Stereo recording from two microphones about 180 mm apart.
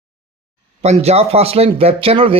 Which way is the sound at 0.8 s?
35° right (ahead or behind).